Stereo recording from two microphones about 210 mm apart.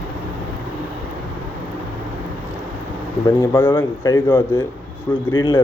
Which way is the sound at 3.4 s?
10° left (ahead or behind).